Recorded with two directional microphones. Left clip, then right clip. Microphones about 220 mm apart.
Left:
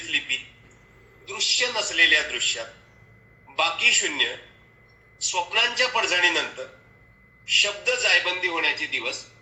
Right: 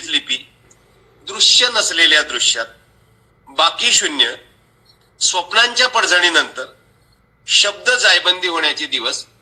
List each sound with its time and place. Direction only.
1.3 s a man's voice: 40° right (ahead or behind)